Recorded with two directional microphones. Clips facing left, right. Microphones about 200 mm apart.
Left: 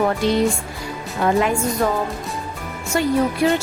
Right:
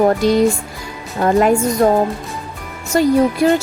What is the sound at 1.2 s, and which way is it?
Speech, 45° right (ahead or behind).